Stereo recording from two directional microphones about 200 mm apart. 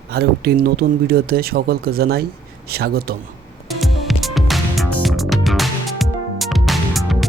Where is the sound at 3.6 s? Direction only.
Centre (ahead or behind).